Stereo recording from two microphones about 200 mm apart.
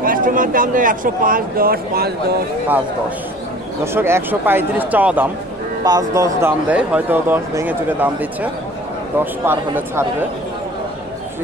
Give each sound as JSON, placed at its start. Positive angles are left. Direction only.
{"t": 0.0, "sound": "speech", "side_deg": -45}
{"t": 3.8, "sound": "speech", "side_deg": -10}